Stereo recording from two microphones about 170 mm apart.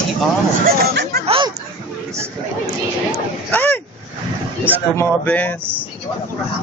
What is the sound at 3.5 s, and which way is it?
Speech, 10° left (ahead or behind).